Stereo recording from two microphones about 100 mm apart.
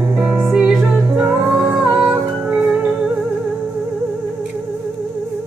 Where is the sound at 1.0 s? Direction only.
15° right (ahead or behind).